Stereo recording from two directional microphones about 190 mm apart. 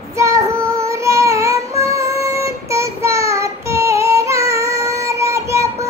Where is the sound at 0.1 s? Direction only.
15° right (ahead or behind).